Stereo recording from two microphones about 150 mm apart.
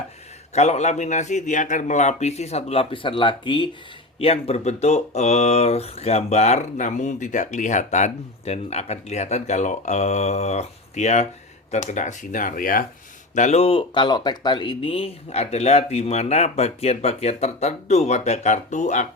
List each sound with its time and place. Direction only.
0.5 s speech: 50° left (ahead or behind); by 3.7 s 30° left (ahead or behind)
4.2 s speech: 40° left (ahead or behind); by 12.8 s 70° left (ahead or behind)
13.3 s speech: 50° left (ahead or behind)